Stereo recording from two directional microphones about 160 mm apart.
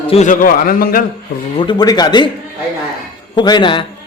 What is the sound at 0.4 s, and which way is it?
Speech, 60° left (ahead or behind).